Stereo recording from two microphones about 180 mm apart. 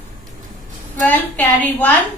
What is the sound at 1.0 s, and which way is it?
Speech, 10° left (ahead or behind).